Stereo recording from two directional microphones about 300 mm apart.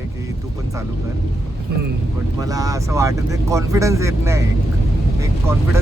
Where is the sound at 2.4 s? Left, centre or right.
Centre.